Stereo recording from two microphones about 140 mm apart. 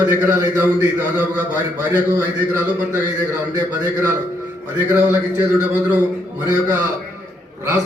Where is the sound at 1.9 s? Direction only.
25° right (ahead or behind).